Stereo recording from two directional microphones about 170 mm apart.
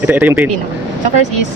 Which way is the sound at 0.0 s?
10° right (ahead or behind).